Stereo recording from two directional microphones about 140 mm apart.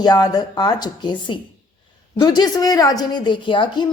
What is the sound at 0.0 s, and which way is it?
Speech, 30° left (ahead or behind).